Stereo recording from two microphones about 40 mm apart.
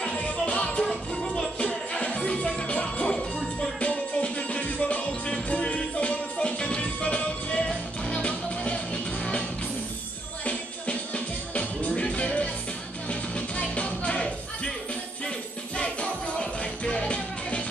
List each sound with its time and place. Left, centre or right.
0.1 s music: left
1.1 s music: centre
1.6 s music: left
10.4 s music: left